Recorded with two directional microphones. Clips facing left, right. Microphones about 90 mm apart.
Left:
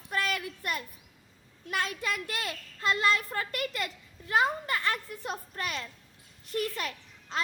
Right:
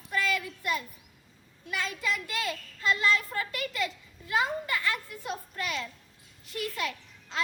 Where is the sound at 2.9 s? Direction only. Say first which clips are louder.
Even; 45° left (ahead or behind).